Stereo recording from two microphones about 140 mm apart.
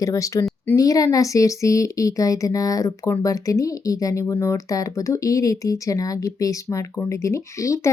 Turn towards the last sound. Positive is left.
turn(degrees=20)  # may be behind; listen again after turning